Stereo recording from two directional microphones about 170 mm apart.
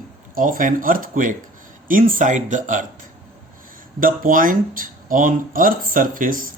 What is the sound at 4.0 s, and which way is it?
A man's voice, 55° right (ahead or behind).